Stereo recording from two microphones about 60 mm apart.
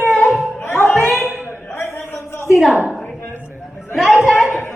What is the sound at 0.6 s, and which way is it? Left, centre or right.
Music, left.